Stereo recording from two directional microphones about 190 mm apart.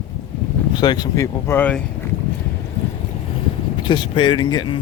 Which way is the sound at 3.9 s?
25° left (ahead or behind).